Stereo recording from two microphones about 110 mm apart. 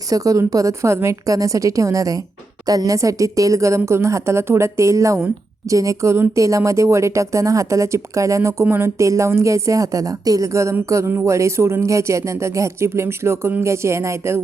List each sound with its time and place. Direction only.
0.1 s a woman's voice: 30° right (ahead or behind)